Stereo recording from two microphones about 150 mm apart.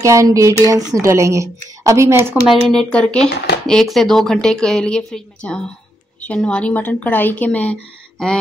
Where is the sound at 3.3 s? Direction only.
90° left.